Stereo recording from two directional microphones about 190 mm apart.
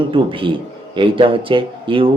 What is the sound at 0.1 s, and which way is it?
A man's voice, 25° right (ahead or behind).